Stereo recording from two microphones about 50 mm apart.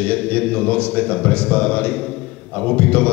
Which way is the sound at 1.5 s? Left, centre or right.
Left.